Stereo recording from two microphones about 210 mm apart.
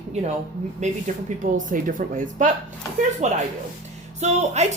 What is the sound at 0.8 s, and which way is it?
Speech, 35° right (ahead or behind).